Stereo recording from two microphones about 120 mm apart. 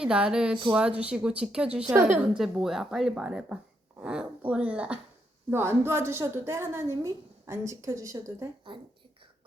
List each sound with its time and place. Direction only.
0.0 s speech: 5° right (ahead or behind)
1.9 s speech: 20° right (ahead or behind)
2.4 s speech: centre (ahead or behind)
5.5 s a woman's voice: 20° right (ahead or behind)
8.7 s speech: 45° right (ahead or behind)